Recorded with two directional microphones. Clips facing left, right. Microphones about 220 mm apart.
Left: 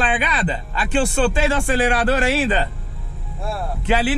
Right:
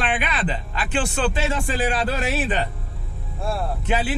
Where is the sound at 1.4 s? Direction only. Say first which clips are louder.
Left 5 dB; 75° left (ahead or behind).